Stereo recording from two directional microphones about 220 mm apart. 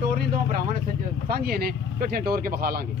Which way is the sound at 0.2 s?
40° right (ahead or behind).